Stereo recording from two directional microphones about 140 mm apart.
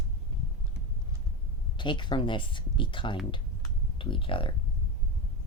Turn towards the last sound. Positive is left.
turn(degrees=40)  # may be behind; listen again after turning